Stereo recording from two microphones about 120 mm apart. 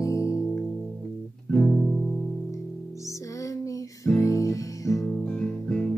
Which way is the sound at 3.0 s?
25° left (ahead or behind).